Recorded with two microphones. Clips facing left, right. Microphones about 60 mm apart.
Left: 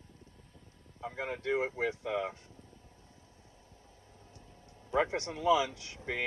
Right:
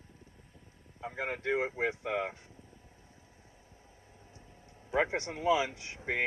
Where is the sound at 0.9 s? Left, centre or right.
Right.